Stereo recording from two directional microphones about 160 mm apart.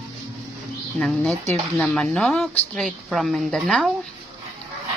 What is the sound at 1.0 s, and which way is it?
Speech, centre (ahead or behind).